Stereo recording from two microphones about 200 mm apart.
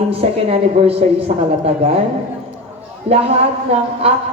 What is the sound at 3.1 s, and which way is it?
Speech, 30° right (ahead or behind).